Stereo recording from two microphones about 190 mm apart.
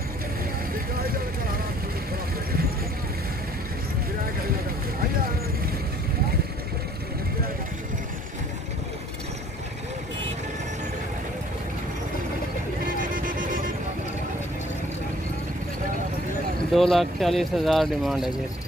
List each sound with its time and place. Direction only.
12.8 s vehicle: 45° right (ahead or behind)
16.7 s speech: centre (ahead or behind)